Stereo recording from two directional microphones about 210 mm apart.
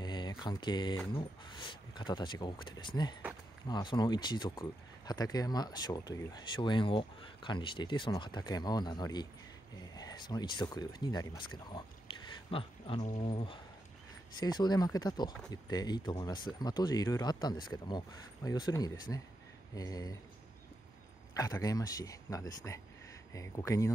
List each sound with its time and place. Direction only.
0.0 s speech: 20° left (ahead or behind)
21.4 s speech: 15° left (ahead or behind)